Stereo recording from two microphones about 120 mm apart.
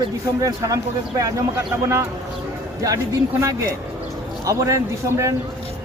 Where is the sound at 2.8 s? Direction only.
25° right (ahead or behind).